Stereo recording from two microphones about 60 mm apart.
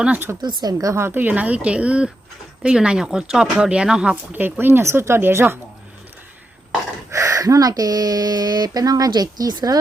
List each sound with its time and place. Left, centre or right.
0.3 s speech: right
0.6 s a woman's voice: right
0.9 s speech: right
1.2 s speech: right; by 4.1 s centre
4.1 s speech: right
7.1 s speech: right